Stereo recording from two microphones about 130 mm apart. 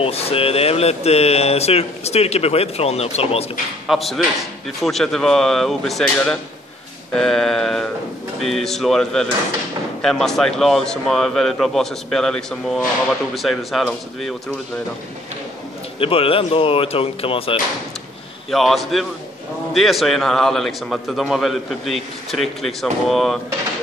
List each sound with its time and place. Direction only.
0.0 s speech: 50° left (ahead or behind)
3.8 s a man's voice: centre (ahead or behind)
16.0 s speech: 45° left (ahead or behind)
18.5 s a man's voice: centre (ahead or behind)